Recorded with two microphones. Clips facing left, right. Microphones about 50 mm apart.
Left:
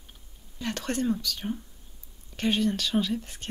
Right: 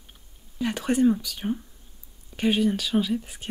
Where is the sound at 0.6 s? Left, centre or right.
Centre.